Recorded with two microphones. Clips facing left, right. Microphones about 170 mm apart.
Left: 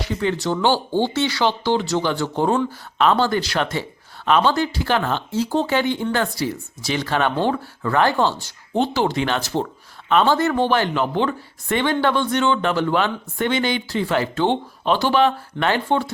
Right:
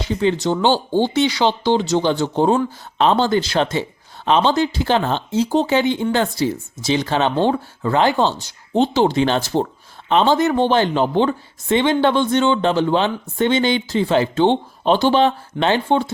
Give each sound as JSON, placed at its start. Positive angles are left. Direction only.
{"t": 0.0, "sound": "speech", "side_deg": -20}